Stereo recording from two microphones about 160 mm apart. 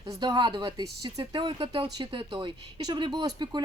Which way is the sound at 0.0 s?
25° right (ahead or behind).